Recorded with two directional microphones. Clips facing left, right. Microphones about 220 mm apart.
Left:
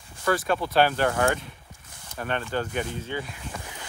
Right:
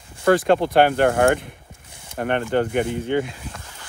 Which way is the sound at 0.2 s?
70° right (ahead or behind).